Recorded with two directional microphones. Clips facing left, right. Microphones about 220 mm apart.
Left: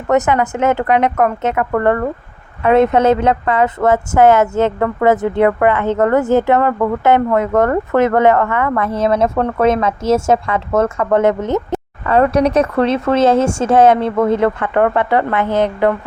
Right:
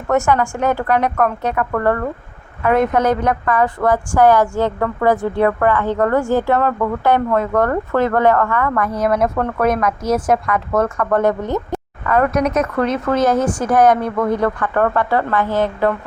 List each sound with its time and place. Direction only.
0.1 s a woman's voice: 20° left (ahead or behind)